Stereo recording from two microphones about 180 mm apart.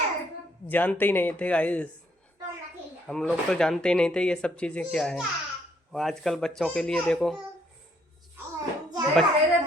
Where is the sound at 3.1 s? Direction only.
5° right (ahead or behind).